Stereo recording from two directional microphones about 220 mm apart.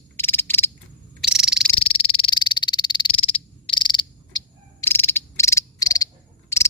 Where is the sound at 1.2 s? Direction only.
5° right (ahead or behind).